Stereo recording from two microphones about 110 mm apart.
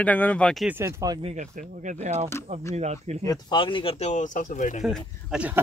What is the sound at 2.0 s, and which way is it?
Speech, 90° right.